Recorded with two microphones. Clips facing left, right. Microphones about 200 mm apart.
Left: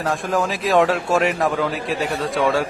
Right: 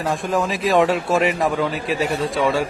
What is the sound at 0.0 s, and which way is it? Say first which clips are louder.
A man's voice: even; centre (ahead or behind).